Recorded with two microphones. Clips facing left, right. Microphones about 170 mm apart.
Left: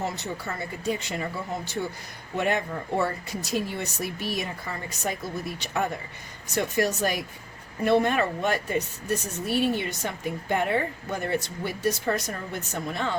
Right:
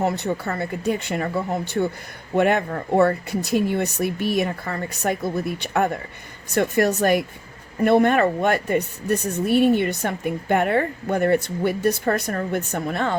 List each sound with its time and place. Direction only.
0.0 s speech: 60° right (ahead or behind)